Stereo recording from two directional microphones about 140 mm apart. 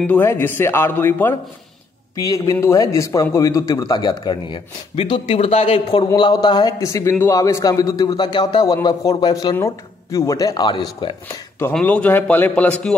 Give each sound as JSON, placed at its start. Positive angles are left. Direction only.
{"t": 0.0, "sound": "a man's voice", "side_deg": 15}
{"t": 6.1, "sound": "a man's voice", "side_deg": 30}
{"t": 11.7, "sound": "a man's voice", "side_deg": 10}